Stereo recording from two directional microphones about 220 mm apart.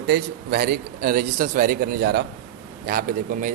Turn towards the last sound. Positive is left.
turn(degrees=-35)  # may be behind; listen again after turning